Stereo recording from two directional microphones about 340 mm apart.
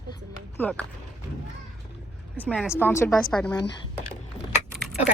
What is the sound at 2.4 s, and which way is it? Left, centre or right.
A woman's voice, centre.